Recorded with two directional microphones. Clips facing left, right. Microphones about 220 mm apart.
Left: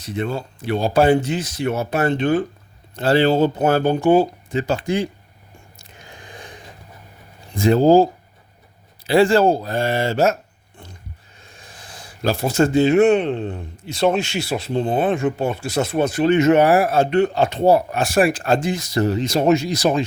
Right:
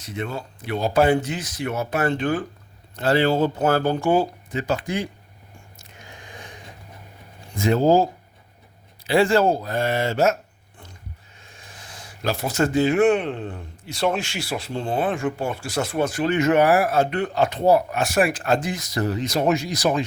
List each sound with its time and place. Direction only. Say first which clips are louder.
0.0 s speech: left 5 dB; 30° left (ahead or behind)
5.8 s squish: left 2 dB; 35° left (ahead or behind)
7.5 s speech: left 5 dB; 35° left (ahead or behind)
9.0 s speech: left 3 dB; 35° left (ahead or behind)
11.7 s speech: left 1 dB; 35° left (ahead or behind)